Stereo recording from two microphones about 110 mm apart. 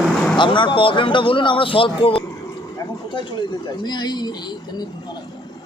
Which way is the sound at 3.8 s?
40° left (ahead or behind).